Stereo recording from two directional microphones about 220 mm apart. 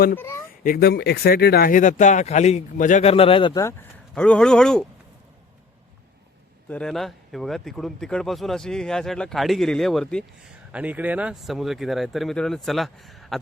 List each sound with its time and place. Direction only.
0.2 s speech: 10° left (ahead or behind)
0.6 s speech: 45° left (ahead or behind); by 3.8 s 15° left (ahead or behind)
4.1 s speech: 5° left (ahead or behind)
6.7 s speech: 5° left (ahead or behind)